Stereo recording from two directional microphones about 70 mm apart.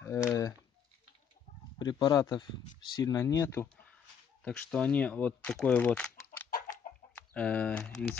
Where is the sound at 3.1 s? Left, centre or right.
Left.